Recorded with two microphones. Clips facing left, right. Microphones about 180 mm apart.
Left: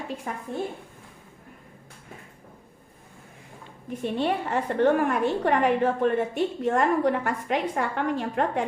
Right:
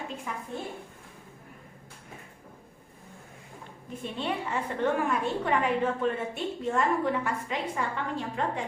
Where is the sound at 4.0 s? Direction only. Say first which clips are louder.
Left 6 dB; 60° left (ahead or behind).